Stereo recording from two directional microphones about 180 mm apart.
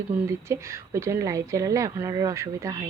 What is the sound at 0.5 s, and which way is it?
A woman's voice, 15° right (ahead or behind).